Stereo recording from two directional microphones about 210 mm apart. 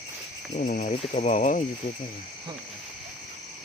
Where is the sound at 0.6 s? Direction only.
40° left (ahead or behind).